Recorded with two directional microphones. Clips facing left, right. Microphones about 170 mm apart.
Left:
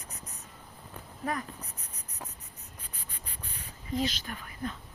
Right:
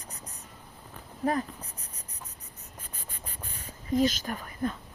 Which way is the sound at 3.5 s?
45° right (ahead or behind).